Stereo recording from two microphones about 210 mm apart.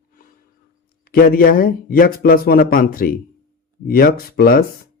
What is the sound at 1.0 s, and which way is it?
Speech, 45° left (ahead or behind).